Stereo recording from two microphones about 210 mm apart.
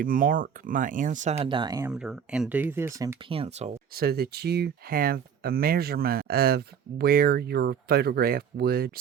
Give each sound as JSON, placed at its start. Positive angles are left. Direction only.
{"t": 0.0, "sound": "speech", "side_deg": -40}
{"t": 1.9, "sound": "speech", "side_deg": -5}
{"t": 3.2, "sound": "speech", "side_deg": -25}
{"t": 3.9, "sound": "speech", "side_deg": -45}